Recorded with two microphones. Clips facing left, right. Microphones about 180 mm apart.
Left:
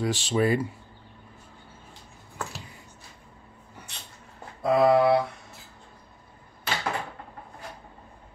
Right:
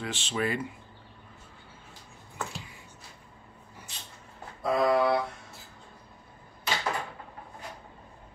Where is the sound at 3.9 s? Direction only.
65° left (ahead or behind).